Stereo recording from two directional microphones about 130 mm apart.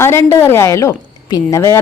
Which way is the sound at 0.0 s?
20° left (ahead or behind).